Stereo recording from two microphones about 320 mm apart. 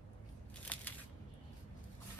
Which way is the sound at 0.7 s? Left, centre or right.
Centre.